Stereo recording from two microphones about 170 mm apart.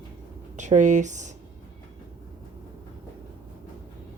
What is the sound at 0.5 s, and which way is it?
Speech, 45° right (ahead or behind).